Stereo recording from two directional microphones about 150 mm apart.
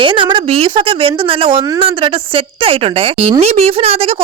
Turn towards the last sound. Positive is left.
turn(degrees=-40)  # may be behind; listen again after turning